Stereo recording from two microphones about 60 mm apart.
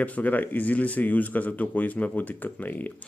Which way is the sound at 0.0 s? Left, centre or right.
Left.